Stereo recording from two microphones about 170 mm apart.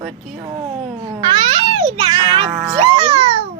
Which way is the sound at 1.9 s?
25° right (ahead or behind).